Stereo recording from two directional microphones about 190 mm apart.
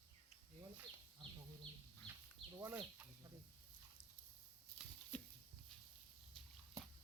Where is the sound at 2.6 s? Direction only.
10° right (ahead or behind).